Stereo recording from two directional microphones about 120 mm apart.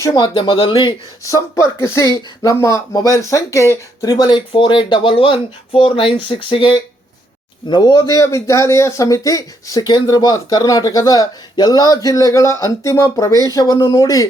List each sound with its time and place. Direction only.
0.1 s speech: 45° left (ahead or behind)
1.2 s speech: 25° left (ahead or behind)